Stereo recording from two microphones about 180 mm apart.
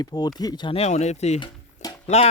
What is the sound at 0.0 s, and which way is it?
Speech, 20° left (ahead or behind).